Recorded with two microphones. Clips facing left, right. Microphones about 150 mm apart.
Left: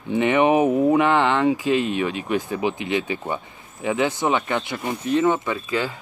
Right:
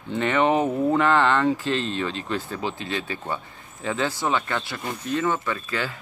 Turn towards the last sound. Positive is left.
turn(degrees=15)  # may be behind; listen again after turning